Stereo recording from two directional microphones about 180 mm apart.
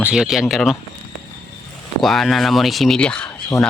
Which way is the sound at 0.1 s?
5° right (ahead or behind).